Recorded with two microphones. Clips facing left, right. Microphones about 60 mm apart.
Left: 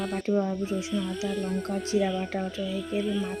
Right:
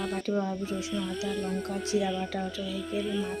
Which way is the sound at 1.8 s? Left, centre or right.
Left.